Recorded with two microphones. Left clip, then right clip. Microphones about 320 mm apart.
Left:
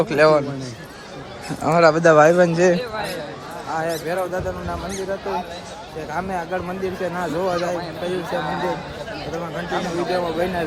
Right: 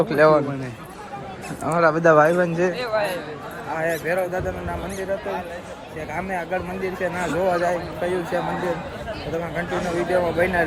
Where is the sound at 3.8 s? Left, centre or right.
Centre.